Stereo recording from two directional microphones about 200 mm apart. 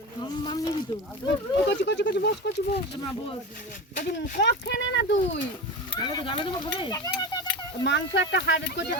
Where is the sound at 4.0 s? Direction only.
40° left (ahead or behind).